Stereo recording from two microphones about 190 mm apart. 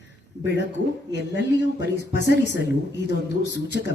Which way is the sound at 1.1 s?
65° left (ahead or behind).